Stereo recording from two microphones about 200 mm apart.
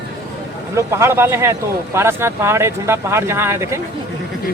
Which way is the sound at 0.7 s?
15° right (ahead or behind).